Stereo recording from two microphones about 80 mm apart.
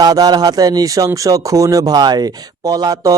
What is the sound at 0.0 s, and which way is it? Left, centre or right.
Speech, right.